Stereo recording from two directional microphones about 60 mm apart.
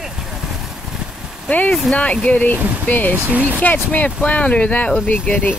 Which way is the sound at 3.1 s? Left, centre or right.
Right.